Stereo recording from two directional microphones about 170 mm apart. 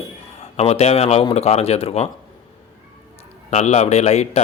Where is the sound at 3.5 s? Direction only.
40° left (ahead or behind).